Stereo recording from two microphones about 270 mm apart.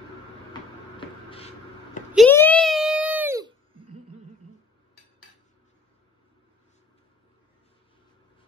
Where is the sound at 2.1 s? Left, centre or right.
Centre.